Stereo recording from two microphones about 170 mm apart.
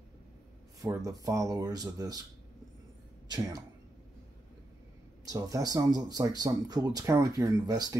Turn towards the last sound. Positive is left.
turn(degrees=-20)  # may be behind; listen again after turning